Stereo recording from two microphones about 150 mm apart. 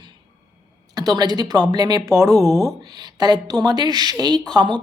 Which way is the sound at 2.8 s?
25° right (ahead or behind).